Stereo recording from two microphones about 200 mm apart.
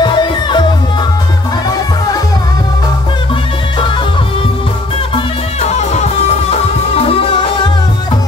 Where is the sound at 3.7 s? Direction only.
25° left (ahead or behind).